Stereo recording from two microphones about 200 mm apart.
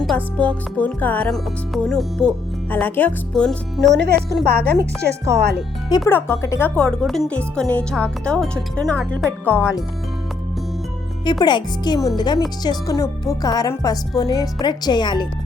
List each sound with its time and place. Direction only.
0.0 s speech: centre (ahead or behind)
3.9 s a woman's voice: 55° right (ahead or behind)
6.1 s speech: 10° left (ahead or behind)
11.3 s speech: 20° left (ahead or behind)